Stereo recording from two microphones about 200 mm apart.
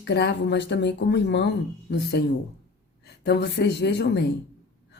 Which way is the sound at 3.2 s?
55° left (ahead or behind).